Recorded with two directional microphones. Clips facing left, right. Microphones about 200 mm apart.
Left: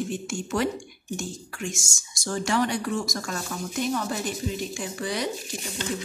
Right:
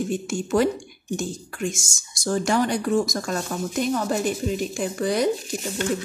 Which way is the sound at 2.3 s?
40° right (ahead or behind).